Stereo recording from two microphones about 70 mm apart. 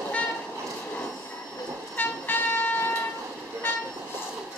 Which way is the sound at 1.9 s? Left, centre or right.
Left.